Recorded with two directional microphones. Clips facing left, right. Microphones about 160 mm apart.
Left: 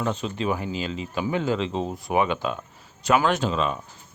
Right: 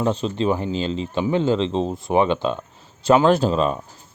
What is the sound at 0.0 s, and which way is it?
Speech, 30° right (ahead or behind).